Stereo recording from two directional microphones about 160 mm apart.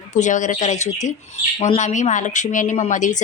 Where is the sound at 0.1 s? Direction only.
50° left (ahead or behind).